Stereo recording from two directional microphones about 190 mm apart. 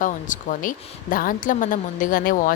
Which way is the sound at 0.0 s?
45° left (ahead or behind).